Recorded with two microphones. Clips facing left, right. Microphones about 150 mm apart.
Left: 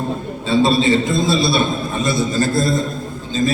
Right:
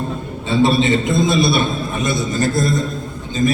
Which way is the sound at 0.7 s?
20° right (ahead or behind).